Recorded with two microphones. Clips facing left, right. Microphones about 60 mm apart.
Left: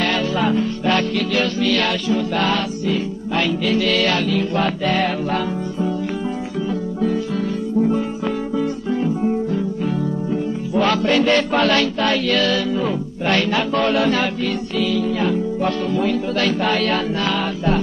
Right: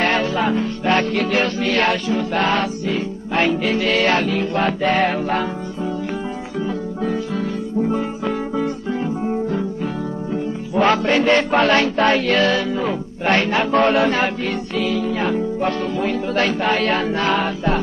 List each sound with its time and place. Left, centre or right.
0.0 s music: right
8.5 s music: right
10.7 s music: right